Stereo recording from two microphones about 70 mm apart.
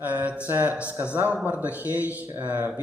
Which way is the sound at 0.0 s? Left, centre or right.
Right.